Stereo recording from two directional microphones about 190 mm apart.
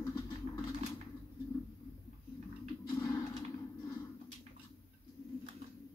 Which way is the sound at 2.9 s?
15° left (ahead or behind).